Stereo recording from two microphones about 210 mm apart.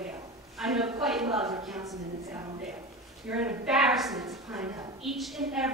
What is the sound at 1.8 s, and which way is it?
Speech, 15° right (ahead or behind).